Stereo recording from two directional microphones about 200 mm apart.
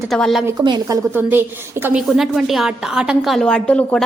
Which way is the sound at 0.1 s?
Centre (ahead or behind).